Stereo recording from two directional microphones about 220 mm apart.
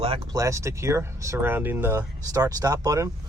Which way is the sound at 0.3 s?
15° right (ahead or behind).